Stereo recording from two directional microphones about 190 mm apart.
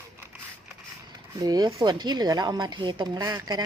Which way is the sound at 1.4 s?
20° right (ahead or behind).